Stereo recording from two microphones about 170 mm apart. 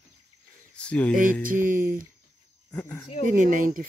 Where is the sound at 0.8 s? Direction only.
5° left (ahead or behind).